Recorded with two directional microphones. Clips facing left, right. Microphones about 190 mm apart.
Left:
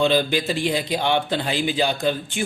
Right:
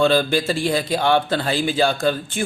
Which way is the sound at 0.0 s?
15° left (ahead or behind).